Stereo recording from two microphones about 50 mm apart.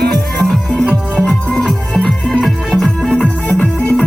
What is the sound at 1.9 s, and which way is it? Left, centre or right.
Music, centre.